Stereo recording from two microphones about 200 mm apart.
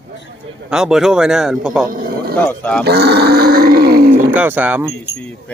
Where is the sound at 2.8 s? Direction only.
55° right (ahead or behind).